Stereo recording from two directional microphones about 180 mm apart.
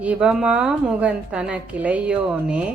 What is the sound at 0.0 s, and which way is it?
A woman's voice, 5° right (ahead or behind).